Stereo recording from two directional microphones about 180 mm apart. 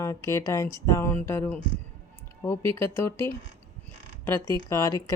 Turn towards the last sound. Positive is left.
turn(degrees=20)  # may be behind; listen again after turning